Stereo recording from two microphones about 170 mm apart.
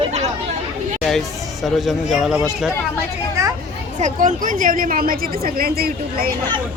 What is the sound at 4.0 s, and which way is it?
A woman's voice, 50° right (ahead or behind).